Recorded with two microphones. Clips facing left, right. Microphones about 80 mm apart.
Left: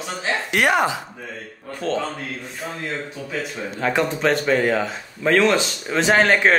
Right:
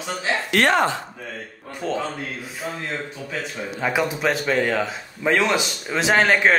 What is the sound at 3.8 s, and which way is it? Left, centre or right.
A man's voice, centre.